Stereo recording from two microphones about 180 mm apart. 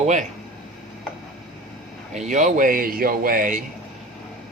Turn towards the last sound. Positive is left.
turn(degrees=-45)  # may be behind; listen again after turning